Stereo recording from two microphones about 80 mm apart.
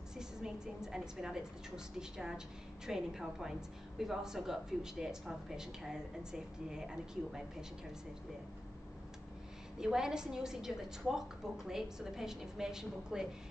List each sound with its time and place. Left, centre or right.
0.2 s a woman's voice: centre
9.8 s a woman's voice: centre